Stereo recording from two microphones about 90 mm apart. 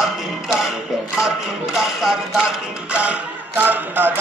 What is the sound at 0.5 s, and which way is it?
Speech, 5° right (ahead or behind).